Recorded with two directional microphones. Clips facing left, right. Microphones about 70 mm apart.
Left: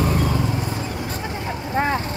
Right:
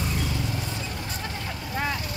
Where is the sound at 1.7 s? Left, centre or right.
Left.